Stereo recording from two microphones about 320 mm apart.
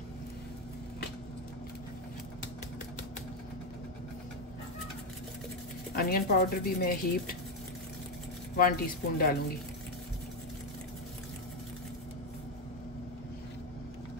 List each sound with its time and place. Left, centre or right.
5.9 s speech: left
8.5 s speech: left